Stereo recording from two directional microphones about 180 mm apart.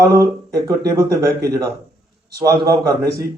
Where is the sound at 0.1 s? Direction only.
20° right (ahead or behind).